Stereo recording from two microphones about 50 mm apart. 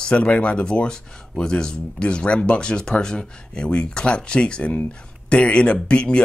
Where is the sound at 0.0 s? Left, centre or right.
Left.